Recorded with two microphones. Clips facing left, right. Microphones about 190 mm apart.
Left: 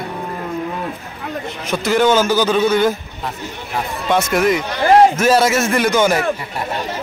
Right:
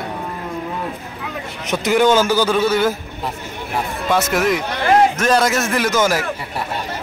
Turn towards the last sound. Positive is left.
turn(degrees=0)  # may be behind; listen again after turning